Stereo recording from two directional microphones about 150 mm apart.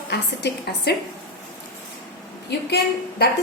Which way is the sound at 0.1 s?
90° left.